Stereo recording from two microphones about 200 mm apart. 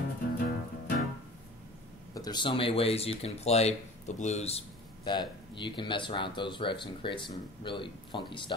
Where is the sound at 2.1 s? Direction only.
20° left (ahead or behind).